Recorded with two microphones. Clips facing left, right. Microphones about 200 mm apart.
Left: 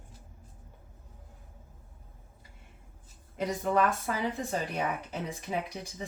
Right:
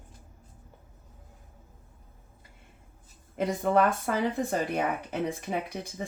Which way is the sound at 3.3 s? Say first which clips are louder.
Right 3 dB; 50° right (ahead or behind).